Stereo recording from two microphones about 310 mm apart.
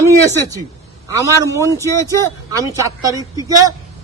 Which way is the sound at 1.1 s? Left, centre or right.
Centre.